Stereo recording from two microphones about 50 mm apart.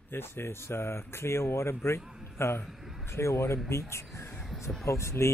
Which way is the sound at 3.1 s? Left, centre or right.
Left.